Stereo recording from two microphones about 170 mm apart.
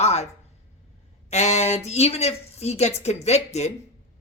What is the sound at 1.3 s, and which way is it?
A woman's voice, 40° left (ahead or behind).